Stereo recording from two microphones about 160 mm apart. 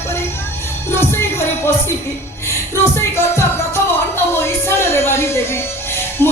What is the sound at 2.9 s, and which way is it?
Music, 15° left (ahead or behind).